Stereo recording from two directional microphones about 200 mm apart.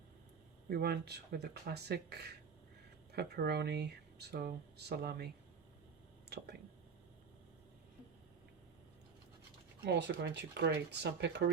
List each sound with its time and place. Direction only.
0.7 s speech: 55° right (ahead or behind)
9.8 s speech: 60° right (ahead or behind)